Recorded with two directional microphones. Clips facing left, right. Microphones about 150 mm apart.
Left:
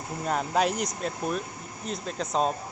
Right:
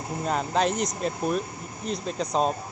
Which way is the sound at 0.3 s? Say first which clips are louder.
Right 1 dB; 5° left (ahead or behind).